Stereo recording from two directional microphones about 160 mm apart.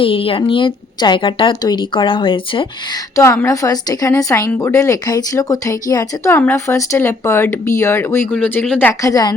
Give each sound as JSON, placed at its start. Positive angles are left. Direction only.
{"t": 0.0, "sound": "speech", "side_deg": 35}
{"t": 3.2, "sound": "a woman's voice", "side_deg": 20}